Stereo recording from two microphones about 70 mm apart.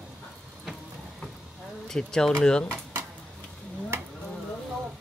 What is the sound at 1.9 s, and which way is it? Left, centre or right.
Speech, centre.